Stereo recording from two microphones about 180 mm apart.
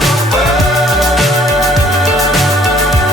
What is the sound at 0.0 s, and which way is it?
Music, centre (ahead or behind).